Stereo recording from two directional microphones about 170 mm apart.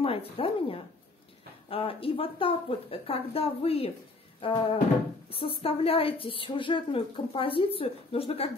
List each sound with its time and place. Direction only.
0.0 s a woman's voice: 35° left (ahead or behind)